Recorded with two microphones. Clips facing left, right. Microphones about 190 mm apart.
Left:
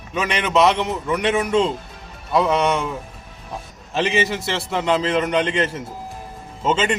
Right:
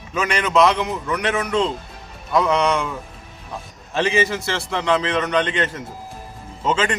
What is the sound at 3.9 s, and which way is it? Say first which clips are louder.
A man's voice: right 1 dB; centre (ahead or behind).